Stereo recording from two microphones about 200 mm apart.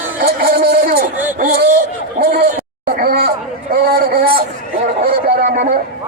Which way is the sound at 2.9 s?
50° right (ahead or behind).